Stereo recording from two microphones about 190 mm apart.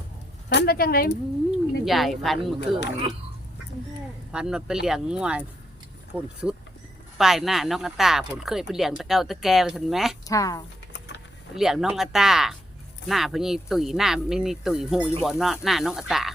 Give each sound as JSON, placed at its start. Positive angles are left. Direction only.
{"t": 0.5, "sound": "speech", "side_deg": 55}
{"t": 1.5, "sound": "speech", "side_deg": 0}
{"t": 4.3, "sound": "speech", "side_deg": -5}
{"t": 10.2, "sound": "speech", "side_deg": 15}
{"t": 11.5, "sound": "speech", "side_deg": 0}